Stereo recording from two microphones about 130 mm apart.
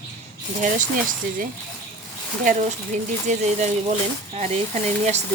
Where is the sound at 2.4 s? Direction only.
90° right.